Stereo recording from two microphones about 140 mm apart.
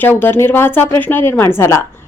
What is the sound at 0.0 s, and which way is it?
Speech, 15° left (ahead or behind).